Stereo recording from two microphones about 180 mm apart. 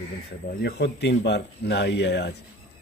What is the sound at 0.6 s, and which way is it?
Speech, 75° left (ahead or behind).